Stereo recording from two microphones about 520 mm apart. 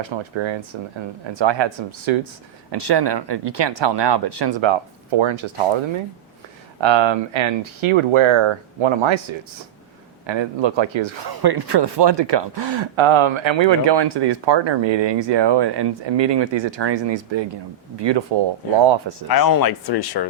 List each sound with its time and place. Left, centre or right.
0.0 s speech: right
6.8 s speech: right
10.2 s speech: right
11.3 s speech: right
19.3 s speech: left